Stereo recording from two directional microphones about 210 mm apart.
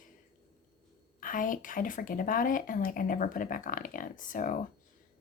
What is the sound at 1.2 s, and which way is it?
Speech, 40° left (ahead or behind).